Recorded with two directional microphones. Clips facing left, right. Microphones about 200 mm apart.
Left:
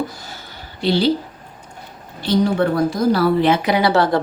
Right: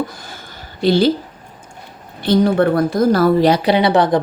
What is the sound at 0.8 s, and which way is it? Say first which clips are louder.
Speech: right 4 dB; 45° right (ahead or behind).